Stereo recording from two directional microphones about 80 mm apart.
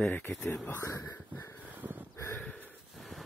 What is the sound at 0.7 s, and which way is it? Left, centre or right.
Speech, left.